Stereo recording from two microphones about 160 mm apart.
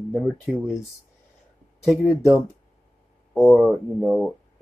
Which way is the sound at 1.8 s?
Centre (ahead or behind).